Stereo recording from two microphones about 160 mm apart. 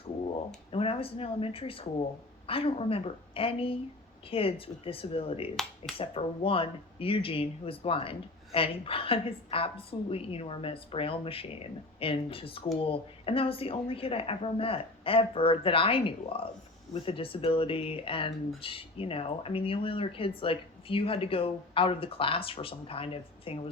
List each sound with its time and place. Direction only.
0.7 s speech: 35° left (ahead or behind)